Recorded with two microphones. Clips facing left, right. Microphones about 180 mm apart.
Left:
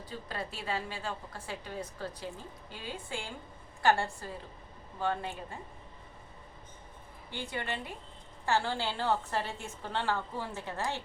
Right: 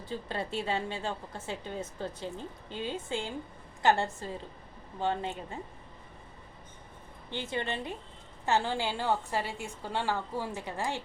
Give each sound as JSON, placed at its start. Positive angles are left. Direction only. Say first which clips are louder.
{"t": 0.0, "sound": "a woman's voice", "louder": "right 4 dB", "side_deg": -25}
{"t": 7.3, "sound": "a woman's voice", "louder": "right 3 dB", "side_deg": -20}